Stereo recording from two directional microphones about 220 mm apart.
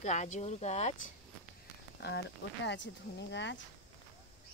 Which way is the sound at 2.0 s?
50° left (ahead or behind).